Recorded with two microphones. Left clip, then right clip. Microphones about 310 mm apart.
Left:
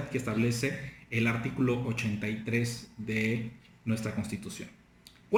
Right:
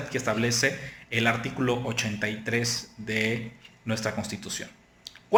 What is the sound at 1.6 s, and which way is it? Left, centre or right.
Speech, centre.